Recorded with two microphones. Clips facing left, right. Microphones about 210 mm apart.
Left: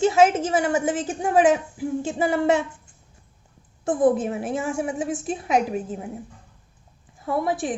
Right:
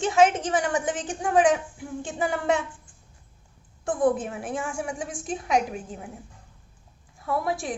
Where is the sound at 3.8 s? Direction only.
20° left (ahead or behind).